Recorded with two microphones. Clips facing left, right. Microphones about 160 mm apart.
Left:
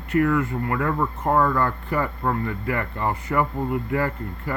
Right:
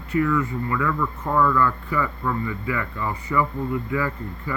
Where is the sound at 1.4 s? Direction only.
45° left (ahead or behind); by 4.5 s 60° left (ahead or behind).